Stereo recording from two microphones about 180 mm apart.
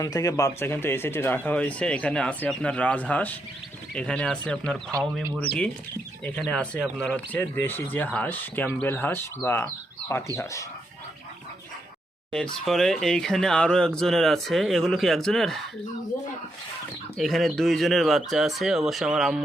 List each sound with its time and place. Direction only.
0.0 s speech: 20° left (ahead or behind)
6.2 s speech: 5° left (ahead or behind)
12.3 s speech: 5° left (ahead or behind)
17.2 s speech: centre (ahead or behind)